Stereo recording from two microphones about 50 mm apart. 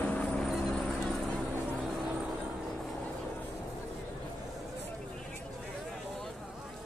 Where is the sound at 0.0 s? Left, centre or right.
Left.